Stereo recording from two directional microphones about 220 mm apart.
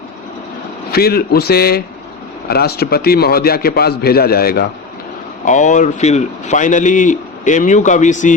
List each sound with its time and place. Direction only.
0.9 s a man's voice: 45° left (ahead or behind)